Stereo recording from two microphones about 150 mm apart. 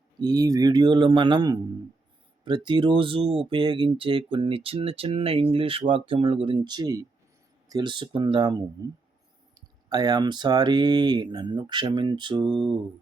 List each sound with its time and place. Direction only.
0.2 s speech: 25° right (ahead or behind)